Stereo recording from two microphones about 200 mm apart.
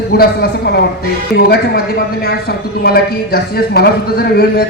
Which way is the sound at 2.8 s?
50° left (ahead or behind).